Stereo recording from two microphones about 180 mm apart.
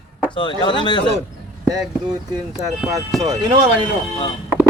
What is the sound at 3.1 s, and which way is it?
Speech, centre (ahead or behind).